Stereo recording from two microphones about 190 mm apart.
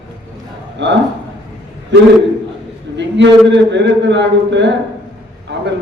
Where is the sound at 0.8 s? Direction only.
70° right (ahead or behind).